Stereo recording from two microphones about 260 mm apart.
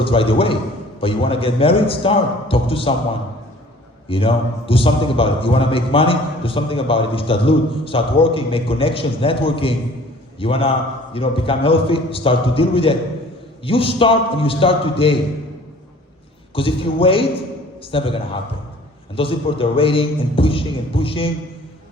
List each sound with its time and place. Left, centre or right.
0.0 s a man's voice: left
4.1 s a man's voice: left
16.6 s a man's voice: left